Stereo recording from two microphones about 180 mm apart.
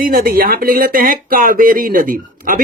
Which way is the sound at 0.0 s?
55° right (ahead or behind).